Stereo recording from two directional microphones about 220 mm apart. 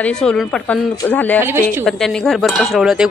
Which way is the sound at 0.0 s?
5° left (ahead or behind).